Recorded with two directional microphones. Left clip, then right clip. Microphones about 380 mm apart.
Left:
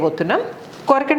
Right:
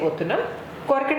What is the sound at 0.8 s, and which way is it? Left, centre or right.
Speech, left.